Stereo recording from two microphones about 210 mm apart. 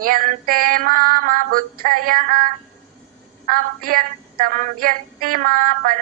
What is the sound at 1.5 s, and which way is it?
Music, 45° right (ahead or behind).